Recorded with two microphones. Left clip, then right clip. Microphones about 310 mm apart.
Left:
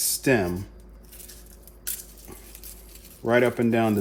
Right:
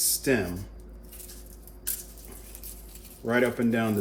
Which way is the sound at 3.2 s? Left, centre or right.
Left.